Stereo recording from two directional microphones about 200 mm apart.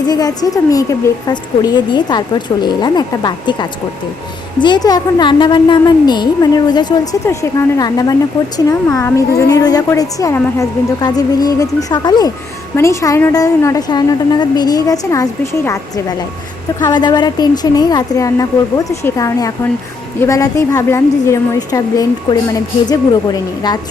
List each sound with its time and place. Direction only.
0.1 s a woman's voice: 20° left (ahead or behind)